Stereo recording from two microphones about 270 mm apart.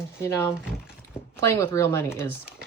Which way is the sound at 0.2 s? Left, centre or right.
Centre.